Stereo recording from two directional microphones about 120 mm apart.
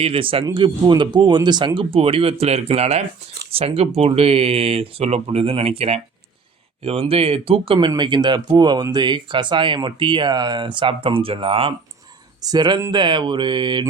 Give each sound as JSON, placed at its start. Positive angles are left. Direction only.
{"t": 0.0, "sound": "speech", "side_deg": -50}
{"t": 12.5, "sound": "speech", "side_deg": -35}